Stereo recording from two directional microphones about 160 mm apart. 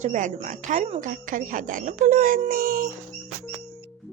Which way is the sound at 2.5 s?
65° right (ahead or behind).